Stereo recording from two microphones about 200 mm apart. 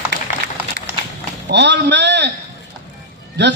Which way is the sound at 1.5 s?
60° right (ahead or behind).